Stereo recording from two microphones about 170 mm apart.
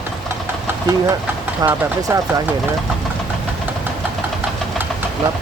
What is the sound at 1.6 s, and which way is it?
Speech, 20° right (ahead or behind).